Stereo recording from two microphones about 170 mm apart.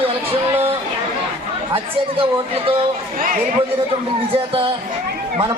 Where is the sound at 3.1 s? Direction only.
55° right (ahead or behind).